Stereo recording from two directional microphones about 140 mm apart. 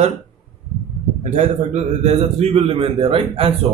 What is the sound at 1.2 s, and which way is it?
A man's voice, 60° right (ahead or behind).